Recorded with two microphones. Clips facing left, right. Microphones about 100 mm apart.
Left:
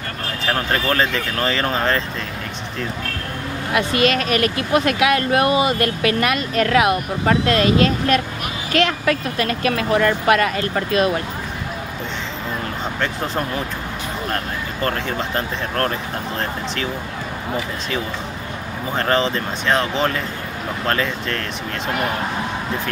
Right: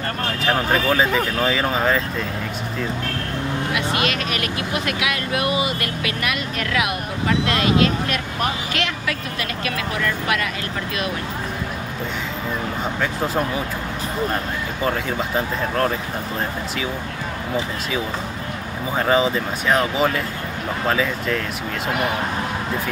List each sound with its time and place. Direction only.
0.5 s speech: 5° right (ahead or behind)
4.0 s speech: 45° left (ahead or behind)
13.0 s speech: 5° right (ahead or behind)
18.9 s speech: 5° right (ahead or behind)